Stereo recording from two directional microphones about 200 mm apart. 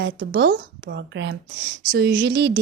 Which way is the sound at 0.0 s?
60° right (ahead or behind).